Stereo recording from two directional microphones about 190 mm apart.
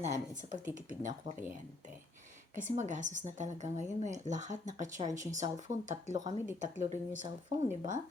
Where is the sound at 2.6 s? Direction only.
40° right (ahead or behind).